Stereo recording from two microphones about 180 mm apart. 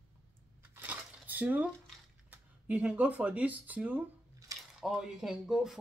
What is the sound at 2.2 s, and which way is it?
Speech, 10° right (ahead or behind).